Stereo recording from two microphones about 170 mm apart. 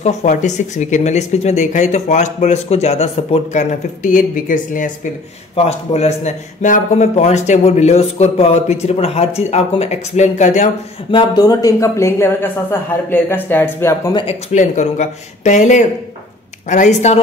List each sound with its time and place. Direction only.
0.0 s speech: 45° left (ahead or behind)
5.7 s speech: 40° left (ahead or behind)
11.1 s speech: 25° left (ahead or behind)
14.5 s speech: 45° left (ahead or behind)